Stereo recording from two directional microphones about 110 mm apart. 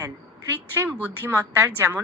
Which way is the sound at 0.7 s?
20° right (ahead or behind).